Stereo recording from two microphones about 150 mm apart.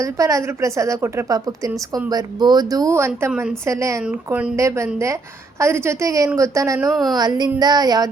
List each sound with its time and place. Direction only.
0.0 s a woman's voice: 20° right (ahead or behind)
4.0 s speech: 10° right (ahead or behind)
4.5 s a woman's voice: 20° right (ahead or behind)
6.9 s a woman's voice: centre (ahead or behind)
7.2 s a woman's voice: 25° right (ahead or behind)